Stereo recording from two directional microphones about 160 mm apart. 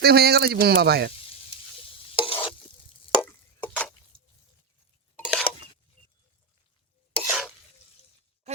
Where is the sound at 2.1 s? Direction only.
35° left (ahead or behind).